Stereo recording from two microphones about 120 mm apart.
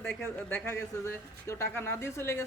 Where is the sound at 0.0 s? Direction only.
10° left (ahead or behind).